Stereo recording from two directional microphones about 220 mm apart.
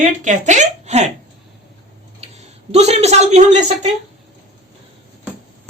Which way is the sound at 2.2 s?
30° right (ahead or behind).